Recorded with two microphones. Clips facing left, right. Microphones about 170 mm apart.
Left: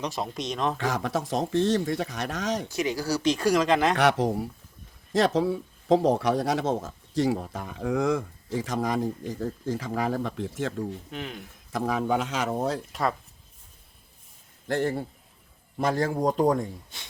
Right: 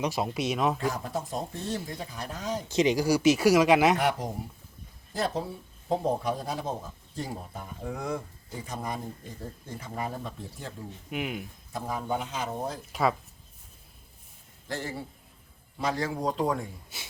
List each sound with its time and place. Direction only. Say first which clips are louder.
0.0 s speech: right 2 dB; 5° right (ahead or behind)
0.8 s speech: left 3 dB; 90° left
2.6 s speech: right 4 dB; 20° right (ahead or behind)
3.9 s speech: left 5 dB; 75° left (ahead or behind)
5.1 s speech: left 8 dB; 90° left
11.1 s speech: right 3 dB; 10° right (ahead or behind)
11.7 s speech: left 6 dB; 90° left
12.9 s speech: right 1 dB; centre (ahead or behind)
14.7 s a man's voice: left 9 dB; 55° left (ahead or behind)
16.9 s speech: right 1 dB; 5° right (ahead or behind)